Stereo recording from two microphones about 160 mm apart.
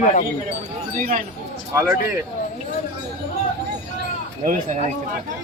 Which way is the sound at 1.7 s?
20° right (ahead or behind).